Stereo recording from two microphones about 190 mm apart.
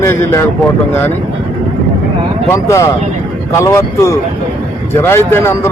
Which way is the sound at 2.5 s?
15° left (ahead or behind).